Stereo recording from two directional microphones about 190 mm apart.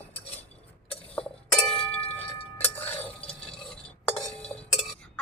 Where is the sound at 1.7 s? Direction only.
30° left (ahead or behind).